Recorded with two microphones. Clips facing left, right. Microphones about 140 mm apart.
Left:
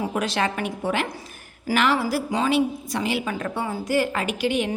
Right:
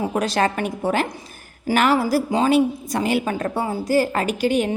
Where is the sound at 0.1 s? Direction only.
40° right (ahead or behind).